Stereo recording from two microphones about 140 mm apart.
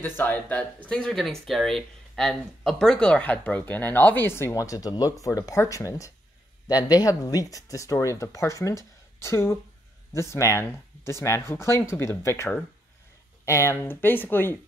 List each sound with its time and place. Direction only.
0.0 s speech: 10° left (ahead or behind)